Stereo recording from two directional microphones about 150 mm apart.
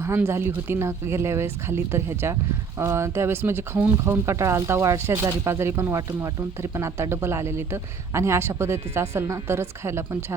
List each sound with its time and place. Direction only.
0.0 s speech: 15° right (ahead or behind)